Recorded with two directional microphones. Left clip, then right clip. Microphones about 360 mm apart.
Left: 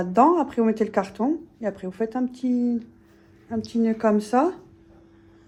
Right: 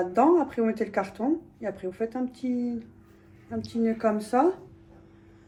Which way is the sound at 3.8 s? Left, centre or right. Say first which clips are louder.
Left 4 dB; left.